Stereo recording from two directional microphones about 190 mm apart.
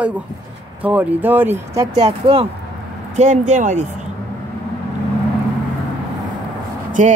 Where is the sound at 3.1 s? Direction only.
40° right (ahead or behind).